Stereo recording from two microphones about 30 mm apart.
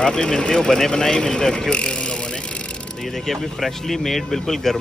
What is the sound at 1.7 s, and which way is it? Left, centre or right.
Vehicle, left.